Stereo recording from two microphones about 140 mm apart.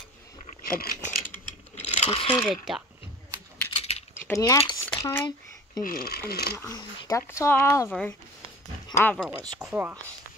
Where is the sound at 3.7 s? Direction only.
45° left (ahead or behind).